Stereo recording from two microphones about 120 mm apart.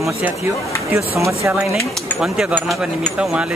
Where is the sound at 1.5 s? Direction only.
5° right (ahead or behind).